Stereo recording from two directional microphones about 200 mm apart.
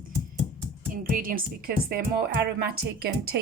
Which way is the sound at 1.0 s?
45° right (ahead or behind).